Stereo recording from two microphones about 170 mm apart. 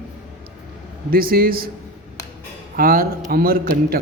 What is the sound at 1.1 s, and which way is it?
Speech, 60° right (ahead or behind).